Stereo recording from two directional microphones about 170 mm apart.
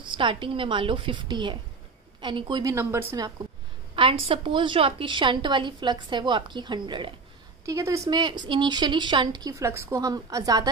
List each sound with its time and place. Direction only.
0.0 s a woman's voice: 30° right (ahead or behind); by 3.3 s 15° right (ahead or behind)
3.9 s a woman's voice: 30° right (ahead or behind)
7.6 s a woman's voice: 15° right (ahead or behind)